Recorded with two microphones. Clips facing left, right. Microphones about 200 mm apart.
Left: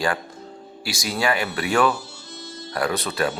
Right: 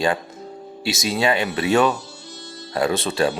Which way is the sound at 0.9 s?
20° right (ahead or behind).